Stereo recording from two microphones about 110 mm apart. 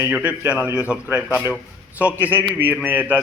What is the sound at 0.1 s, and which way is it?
A man's voice, 10° right (ahead or behind).